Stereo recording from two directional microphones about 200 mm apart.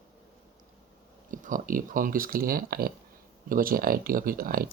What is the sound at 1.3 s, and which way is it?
Speech, 40° right (ahead or behind).